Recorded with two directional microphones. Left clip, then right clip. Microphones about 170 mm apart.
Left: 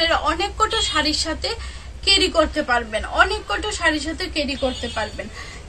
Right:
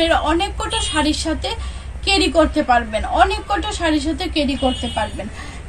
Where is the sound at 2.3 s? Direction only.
15° left (ahead or behind).